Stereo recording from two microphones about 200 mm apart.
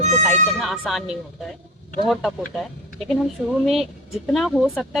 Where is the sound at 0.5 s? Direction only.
Centre (ahead or behind).